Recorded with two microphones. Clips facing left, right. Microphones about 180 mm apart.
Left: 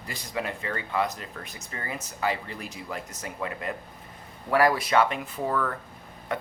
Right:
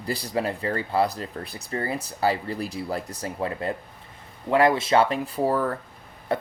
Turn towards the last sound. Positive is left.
turn(degrees=-35)  # may be behind; listen again after turning